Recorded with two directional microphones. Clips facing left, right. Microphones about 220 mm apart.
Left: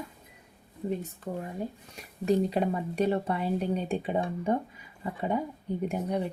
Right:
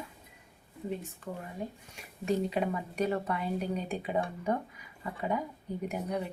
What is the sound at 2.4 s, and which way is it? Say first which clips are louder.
A woman's voice: left 3 dB; 35° left (ahead or behind).